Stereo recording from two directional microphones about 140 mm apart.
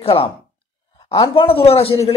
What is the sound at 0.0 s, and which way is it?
Speech, 45° left (ahead or behind).